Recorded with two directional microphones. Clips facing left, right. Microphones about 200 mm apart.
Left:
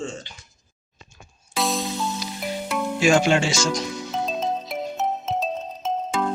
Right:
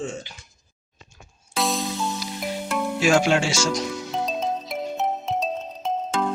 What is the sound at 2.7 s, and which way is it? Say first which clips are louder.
Speech: left 1 dB; centre (ahead or behind).